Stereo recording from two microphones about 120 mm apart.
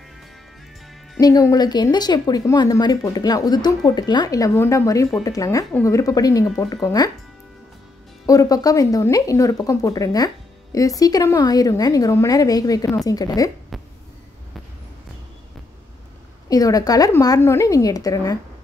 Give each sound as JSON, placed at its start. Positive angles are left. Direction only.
{"t": 1.2, "sound": "speech", "side_deg": 30}
{"t": 8.3, "sound": "speech", "side_deg": 30}
{"t": 16.4, "sound": "speech", "side_deg": 30}